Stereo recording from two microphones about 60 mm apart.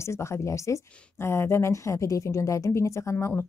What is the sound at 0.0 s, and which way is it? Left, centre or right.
Speech, left.